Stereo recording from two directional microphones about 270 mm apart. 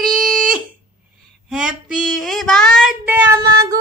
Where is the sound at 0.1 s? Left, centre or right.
Centre.